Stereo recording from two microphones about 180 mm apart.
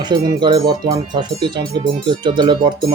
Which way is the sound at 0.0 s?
25° right (ahead or behind).